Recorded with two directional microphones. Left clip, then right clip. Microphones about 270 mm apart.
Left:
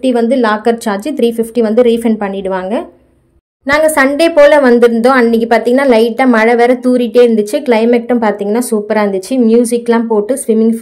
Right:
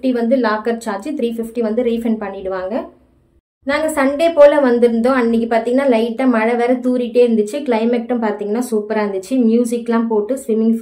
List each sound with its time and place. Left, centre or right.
0.0 s a woman's voice: left